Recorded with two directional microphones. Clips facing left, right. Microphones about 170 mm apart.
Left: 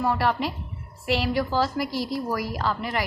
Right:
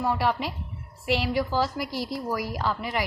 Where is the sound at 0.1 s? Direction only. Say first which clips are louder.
Left 2 dB; 10° right (ahead or behind).